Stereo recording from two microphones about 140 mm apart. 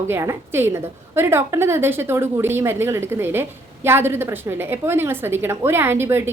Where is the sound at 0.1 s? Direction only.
20° right (ahead or behind).